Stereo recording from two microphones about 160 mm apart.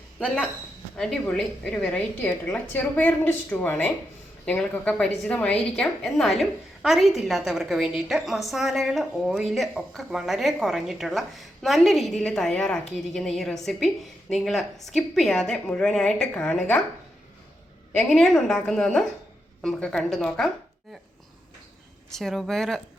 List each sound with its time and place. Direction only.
0.9 s a woman's voice: 5° left (ahead or behind)
18.0 s a woman's voice: centre (ahead or behind)
22.1 s a woman's voice: centre (ahead or behind)